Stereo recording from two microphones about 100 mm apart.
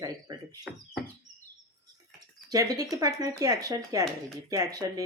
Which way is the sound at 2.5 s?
40° right (ahead or behind).